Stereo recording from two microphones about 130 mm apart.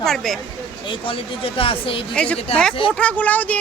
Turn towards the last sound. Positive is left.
turn(degrees=10)  # may be behind; listen again after turning